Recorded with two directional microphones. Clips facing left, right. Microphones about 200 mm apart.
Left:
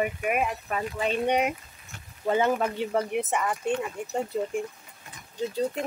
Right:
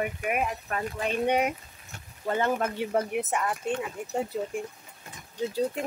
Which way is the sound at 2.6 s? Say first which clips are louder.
Left 1 dB; 5° right (ahead or behind).